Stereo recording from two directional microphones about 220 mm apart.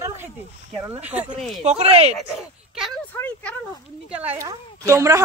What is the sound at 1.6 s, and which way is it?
Speech, 30° right (ahead or behind).